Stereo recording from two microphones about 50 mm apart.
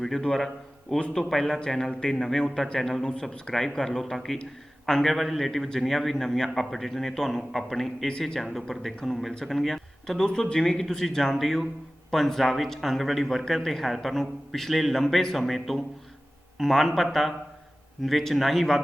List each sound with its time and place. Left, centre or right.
0.0 s a man's voice: centre
2.7 s speech: centre
3.1 s a man's voice: centre